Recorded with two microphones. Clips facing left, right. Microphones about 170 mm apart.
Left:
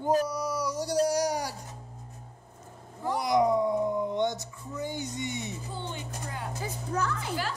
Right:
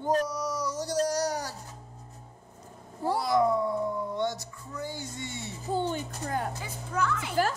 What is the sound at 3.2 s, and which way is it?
Speech, 15° left (ahead or behind).